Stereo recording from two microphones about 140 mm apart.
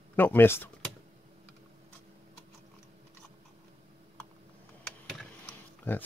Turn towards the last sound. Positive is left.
turn(degrees=10)  # may be behind; listen again after turning